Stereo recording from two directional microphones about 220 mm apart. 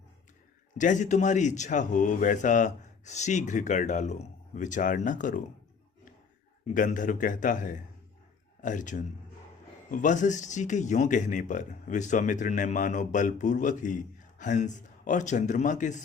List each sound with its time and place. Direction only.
0.8 s speech: 35° left (ahead or behind)
6.7 s speech: 35° left (ahead or behind)